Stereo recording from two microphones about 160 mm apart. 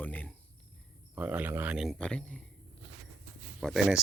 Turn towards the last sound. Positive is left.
turn(degrees=0)  # may be behind; listen again after turning